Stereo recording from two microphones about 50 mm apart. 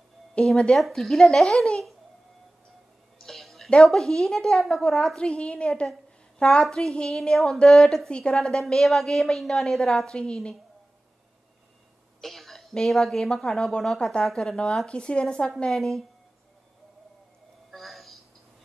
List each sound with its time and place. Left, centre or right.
0.4 s speech: left
0.7 s a woman's voice: centre
3.2 s a sound: centre
3.8 s speech: centre
5.3 s a woman's voice: left
6.6 s a woman's voice: centre
12.2 s a woman's voice: centre
14.9 s a woman's voice: centre
17.6 s a sound: centre